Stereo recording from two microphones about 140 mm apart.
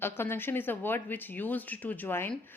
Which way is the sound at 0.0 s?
15° left (ahead or behind).